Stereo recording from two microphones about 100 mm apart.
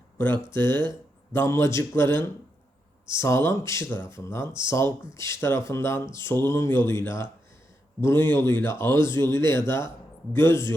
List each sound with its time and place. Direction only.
0.5 s speech: 25° left (ahead or behind)